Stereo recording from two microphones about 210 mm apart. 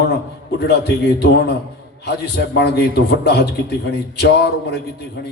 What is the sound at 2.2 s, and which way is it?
A man's voice, 50° left (ahead or behind).